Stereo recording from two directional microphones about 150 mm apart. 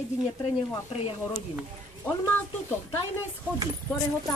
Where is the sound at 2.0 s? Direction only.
10° left (ahead or behind).